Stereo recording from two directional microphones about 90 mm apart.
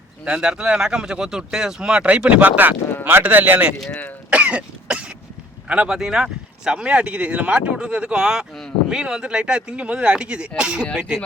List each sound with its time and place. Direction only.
0.3 s speech: 5° right (ahead or behind)
3.8 s speech: 5° left (ahead or behind)
4.3 s cough: 15° right (ahead or behind)
5.6 s speech: 10° right (ahead or behind)